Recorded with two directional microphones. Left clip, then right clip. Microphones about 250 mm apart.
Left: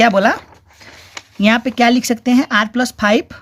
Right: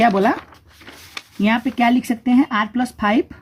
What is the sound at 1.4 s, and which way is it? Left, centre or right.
Speech, left.